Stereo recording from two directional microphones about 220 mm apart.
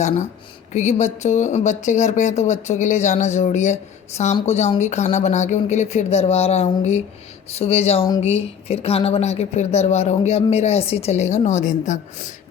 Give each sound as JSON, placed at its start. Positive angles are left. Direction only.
{"t": 0.7, "sound": "speech", "side_deg": 30}